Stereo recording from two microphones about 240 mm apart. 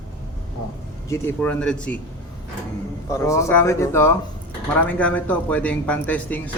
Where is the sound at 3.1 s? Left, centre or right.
Centre.